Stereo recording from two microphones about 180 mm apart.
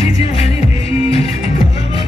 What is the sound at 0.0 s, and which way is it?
Music, 35° left (ahead or behind).